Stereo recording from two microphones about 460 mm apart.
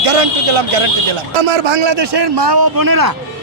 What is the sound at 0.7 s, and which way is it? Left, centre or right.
A man's voice, right.